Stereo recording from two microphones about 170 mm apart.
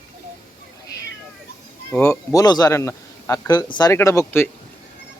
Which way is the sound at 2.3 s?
25° left (ahead or behind).